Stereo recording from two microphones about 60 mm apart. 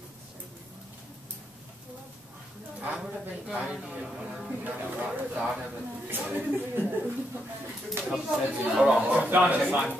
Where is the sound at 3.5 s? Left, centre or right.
Centre.